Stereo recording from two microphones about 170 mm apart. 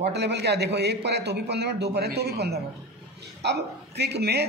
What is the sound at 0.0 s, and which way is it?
A man's voice, 80° right.